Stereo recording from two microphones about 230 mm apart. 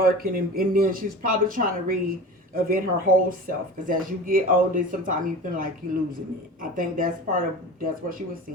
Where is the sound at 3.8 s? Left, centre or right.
Right.